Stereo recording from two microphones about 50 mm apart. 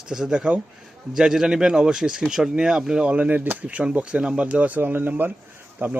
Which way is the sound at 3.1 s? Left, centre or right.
Right.